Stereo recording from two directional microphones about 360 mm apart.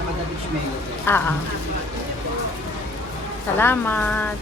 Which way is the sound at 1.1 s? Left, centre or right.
Centre.